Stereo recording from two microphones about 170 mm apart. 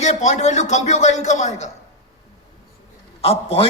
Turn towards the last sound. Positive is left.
turn(degrees=35)  # may be behind; listen again after turning